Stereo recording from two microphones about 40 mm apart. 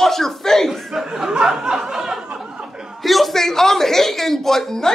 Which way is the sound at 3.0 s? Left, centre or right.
Centre.